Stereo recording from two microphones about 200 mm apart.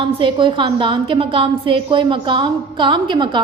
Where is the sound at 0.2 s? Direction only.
25° right (ahead or behind).